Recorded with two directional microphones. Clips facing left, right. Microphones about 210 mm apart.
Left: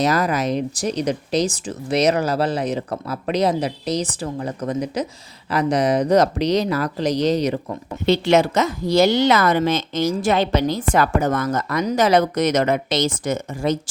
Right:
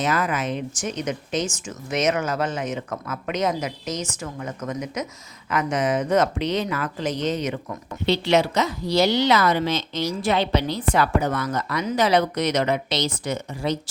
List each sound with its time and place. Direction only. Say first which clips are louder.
0.0 s speech: left 5 dB; 40° left (ahead or behind)